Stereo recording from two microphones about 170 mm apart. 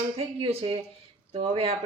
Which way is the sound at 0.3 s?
30° right (ahead or behind).